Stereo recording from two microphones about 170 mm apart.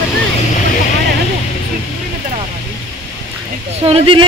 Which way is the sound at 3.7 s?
35° right (ahead or behind).